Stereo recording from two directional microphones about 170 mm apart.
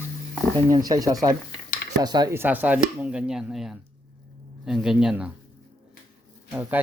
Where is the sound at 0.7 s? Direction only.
20° right (ahead or behind).